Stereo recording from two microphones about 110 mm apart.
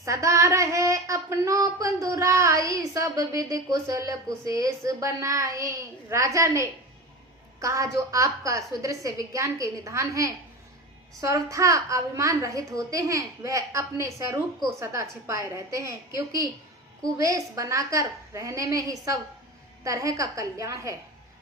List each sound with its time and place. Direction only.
0.0 s child singing: 30° right (ahead or behind)
11.5 s child singing: 30° right (ahead or behind)
17.0 s a woman's voice: 30° right (ahead or behind)
19.8 s child singing: 30° right (ahead or behind)